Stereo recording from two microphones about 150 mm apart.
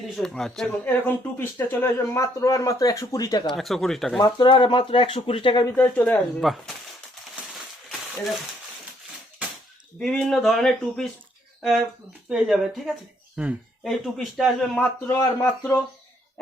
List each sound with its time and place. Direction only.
0.2 s speech: centre (ahead or behind); by 3.4 s 25° left (ahead or behind)
3.6 s speech: centre (ahead or behind)
4.2 s speech: 30° left (ahead or behind)
5.7 s speech: 10° left (ahead or behind)
6.4 s speech: centre (ahead or behind)
10.0 s speech: 5° left (ahead or behind)
12.3 s speech: centre (ahead or behind)
15.0 s speech: 20° left (ahead or behind)